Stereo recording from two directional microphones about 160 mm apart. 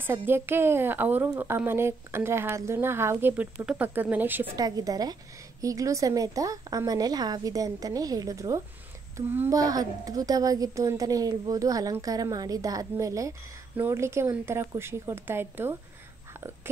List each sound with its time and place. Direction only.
0.0 s a woman's voice: 15° right (ahead or behind)
4.6 s a woman's voice: 25° right (ahead or behind)